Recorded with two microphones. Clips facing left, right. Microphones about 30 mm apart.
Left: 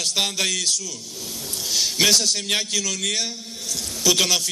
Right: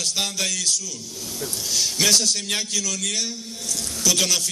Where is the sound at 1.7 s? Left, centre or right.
Centre.